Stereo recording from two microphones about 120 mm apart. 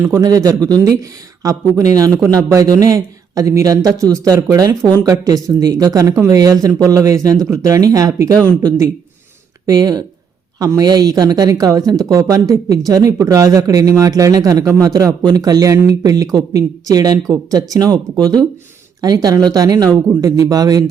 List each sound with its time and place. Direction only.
0.2 s a man's voice: 30° right (ahead or behind)
9.6 s a man's voice: 30° right (ahead or behind)